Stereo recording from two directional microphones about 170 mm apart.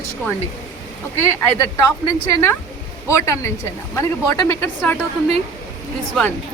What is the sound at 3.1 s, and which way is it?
Speech, 15° left (ahead or behind).